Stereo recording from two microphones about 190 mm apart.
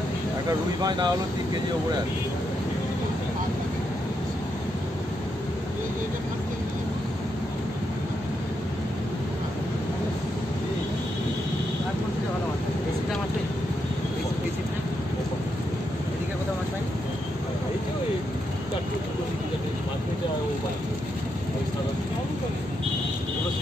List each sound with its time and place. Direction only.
0.8 s speech: 20° right (ahead or behind)